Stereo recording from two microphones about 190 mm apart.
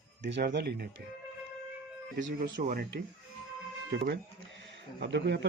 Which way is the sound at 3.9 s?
70° right (ahead or behind).